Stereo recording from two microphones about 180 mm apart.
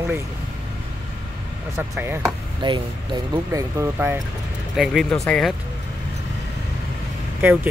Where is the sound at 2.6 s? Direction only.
25° right (ahead or behind).